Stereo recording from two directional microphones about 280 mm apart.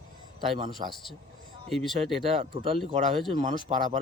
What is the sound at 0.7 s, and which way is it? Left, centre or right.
Speech, centre.